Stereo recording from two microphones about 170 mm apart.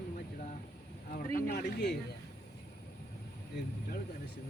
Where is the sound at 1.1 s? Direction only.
65° left (ahead or behind).